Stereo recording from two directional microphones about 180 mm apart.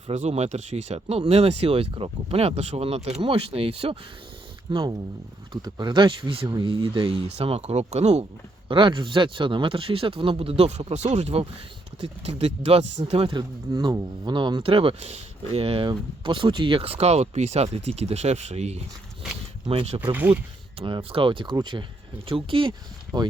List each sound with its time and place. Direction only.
0.1 s speech: 35° right (ahead or behind)
4.7 s speech: 20° right (ahead or behind)
20.1 s speech: 10° right (ahead or behind)
20.7 s speech: 30° right (ahead or behind)